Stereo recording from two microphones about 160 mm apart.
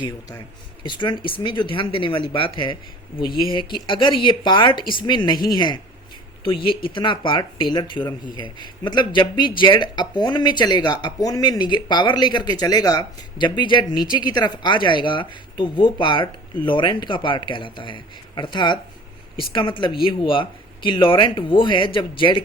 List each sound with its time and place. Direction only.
0.9 s speech: 30° left (ahead or behind)